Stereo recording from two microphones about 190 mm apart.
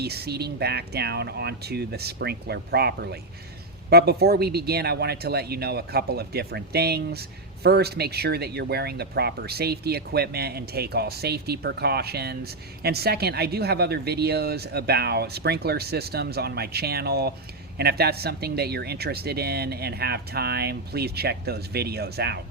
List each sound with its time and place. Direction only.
0.0 s speech: 55° right (ahead or behind)